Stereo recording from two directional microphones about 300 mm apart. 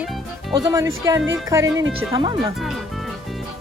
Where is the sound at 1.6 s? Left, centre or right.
Right.